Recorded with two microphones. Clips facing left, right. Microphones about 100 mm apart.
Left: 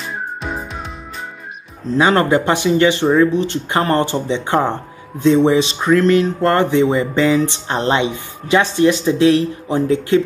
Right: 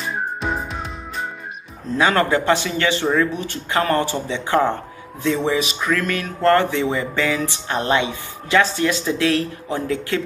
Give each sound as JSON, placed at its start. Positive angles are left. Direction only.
{"t": 0.1, "sound": "music", "side_deg": 0}
{"t": 2.0, "sound": "speech", "side_deg": 20}